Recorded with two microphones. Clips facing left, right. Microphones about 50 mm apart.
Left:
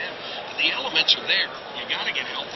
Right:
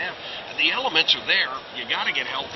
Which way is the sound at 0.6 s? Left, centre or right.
Centre.